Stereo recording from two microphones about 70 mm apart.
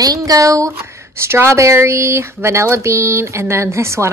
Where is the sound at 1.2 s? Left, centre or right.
Right.